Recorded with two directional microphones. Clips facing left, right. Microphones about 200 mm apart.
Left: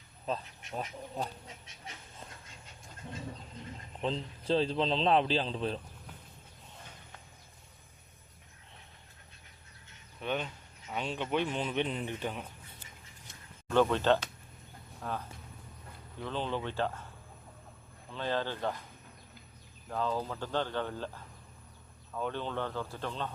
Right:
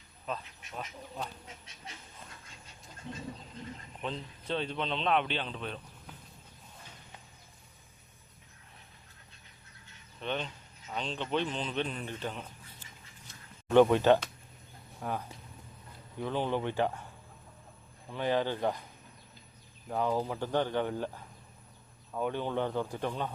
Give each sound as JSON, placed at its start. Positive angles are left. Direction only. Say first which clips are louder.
{"t": 0.3, "sound": "speech", "louder": "left 3 dB", "side_deg": 30}
{"t": 4.0, "sound": "speech", "louder": "left 5 dB", "side_deg": 30}
{"t": 10.2, "sound": "speech", "louder": "left 1 dB", "side_deg": 5}
{"t": 13.7, "sound": "speech", "louder": "right 4 dB", "side_deg": -15}
{"t": 18.1, "sound": "speech", "louder": "right 4 dB", "side_deg": -15}
{"t": 19.9, "sound": "speech", "louder": "right 3 dB", "side_deg": -15}
{"t": 22.1, "sound": "speech", "louder": "right 3 dB", "side_deg": -15}